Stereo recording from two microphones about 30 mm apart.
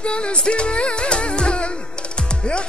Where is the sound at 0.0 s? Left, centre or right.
Left.